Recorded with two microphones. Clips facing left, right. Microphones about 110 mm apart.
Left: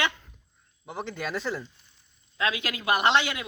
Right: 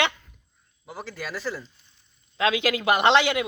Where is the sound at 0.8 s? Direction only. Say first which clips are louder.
Left 2 dB; centre (ahead or behind).